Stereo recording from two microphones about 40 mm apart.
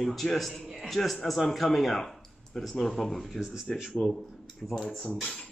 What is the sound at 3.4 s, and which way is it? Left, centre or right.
Speech, centre.